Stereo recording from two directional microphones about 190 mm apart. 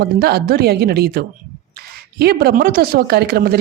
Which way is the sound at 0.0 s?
55° right (ahead or behind).